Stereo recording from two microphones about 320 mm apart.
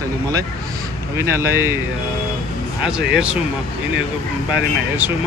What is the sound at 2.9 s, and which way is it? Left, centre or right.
Speech, centre.